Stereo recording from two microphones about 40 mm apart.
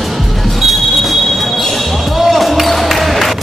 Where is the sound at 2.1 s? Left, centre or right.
Centre.